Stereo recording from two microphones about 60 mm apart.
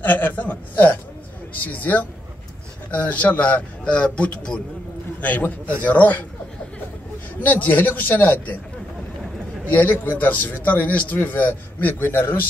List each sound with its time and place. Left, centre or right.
0.0 s a sound: left
1.6 s a man's voice: left
5.9 s a man's voice: left
7.4 s a man's voice: left
9.7 s a man's voice: left